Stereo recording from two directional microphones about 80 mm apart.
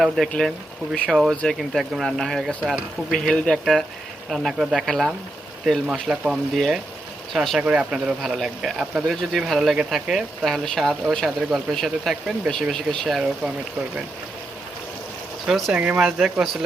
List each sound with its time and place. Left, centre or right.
0.0 s speech: centre
7.6 s speech: centre
15.4 s speech: centre
15.7 s speech: centre